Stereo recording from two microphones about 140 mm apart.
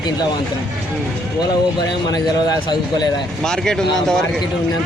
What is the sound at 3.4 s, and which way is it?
Speech, 5° left (ahead or behind).